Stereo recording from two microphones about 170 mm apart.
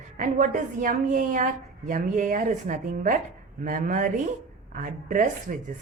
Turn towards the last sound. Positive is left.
turn(degrees=-50)  # may be behind; listen again after turning